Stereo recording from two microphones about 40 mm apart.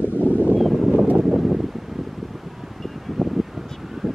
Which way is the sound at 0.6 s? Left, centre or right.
Centre.